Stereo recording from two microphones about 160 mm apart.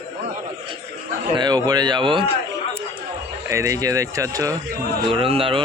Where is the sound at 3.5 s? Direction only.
20° right (ahead or behind).